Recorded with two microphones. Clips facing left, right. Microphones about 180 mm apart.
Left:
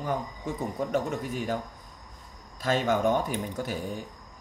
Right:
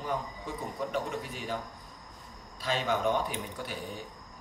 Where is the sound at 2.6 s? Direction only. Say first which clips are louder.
Left 5 dB; 45° left (ahead or behind).